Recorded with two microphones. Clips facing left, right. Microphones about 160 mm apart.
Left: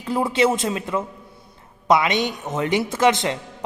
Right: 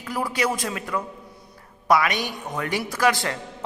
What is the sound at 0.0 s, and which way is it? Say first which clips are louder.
A man's voice: left 6 dB; 25° left (ahead or behind).